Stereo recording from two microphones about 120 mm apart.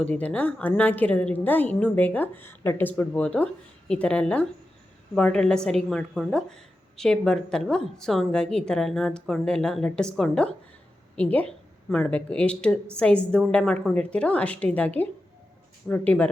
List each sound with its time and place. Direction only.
0.0 s a woman's voice: 10° left (ahead or behind)